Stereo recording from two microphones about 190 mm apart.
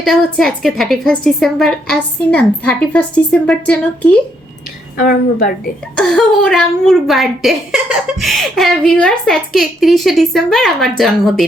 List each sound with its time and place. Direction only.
0.0 s a woman's voice: centre (ahead or behind)
4.9 s a woman's voice: 50° left (ahead or behind)
6.0 s a woman's voice: 5° left (ahead or behind)